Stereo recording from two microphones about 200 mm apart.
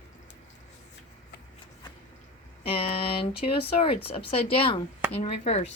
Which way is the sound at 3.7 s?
30° left (ahead or behind).